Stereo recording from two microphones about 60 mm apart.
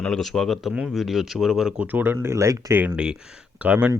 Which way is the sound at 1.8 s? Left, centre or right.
Right.